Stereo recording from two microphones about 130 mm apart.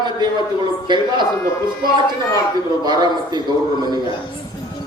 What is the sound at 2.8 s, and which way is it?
Speech, 35° right (ahead or behind).